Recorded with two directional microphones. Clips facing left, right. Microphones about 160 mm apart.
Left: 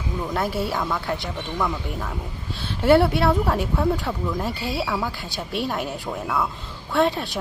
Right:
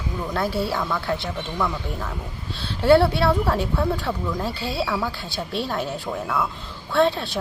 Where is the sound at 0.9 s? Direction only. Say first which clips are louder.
Right 1 dB; 15° left (ahead or behind).